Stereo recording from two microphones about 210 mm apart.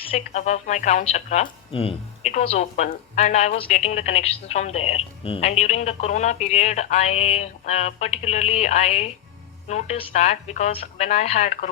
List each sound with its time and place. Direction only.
0.3 s a woman's voice: 35° left (ahead or behind)